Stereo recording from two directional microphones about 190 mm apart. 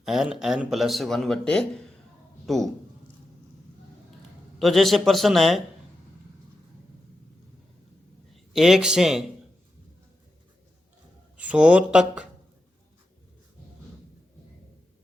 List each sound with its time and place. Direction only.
0.0 s a man's voice: centre (ahead or behind)
4.6 s a man's voice: centre (ahead or behind)
8.5 s a man's voice: centre (ahead or behind)
11.3 s a man's voice: 5° right (ahead or behind)